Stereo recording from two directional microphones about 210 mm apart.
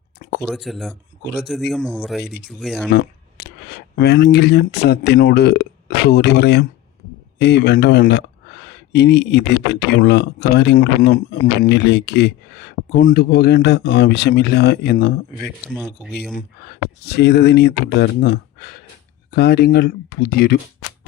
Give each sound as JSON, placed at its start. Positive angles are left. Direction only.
{"t": 0.2, "sound": "a sound", "side_deg": 50}
{"t": 0.4, "sound": "speech", "side_deg": 0}
{"t": 2.9, "sound": "speech", "side_deg": 50}
{"t": 15.4, "sound": "speech", "side_deg": 0}
{"t": 16.3, "sound": "speech", "side_deg": 50}